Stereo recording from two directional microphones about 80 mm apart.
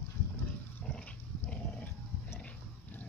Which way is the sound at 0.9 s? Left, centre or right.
Centre.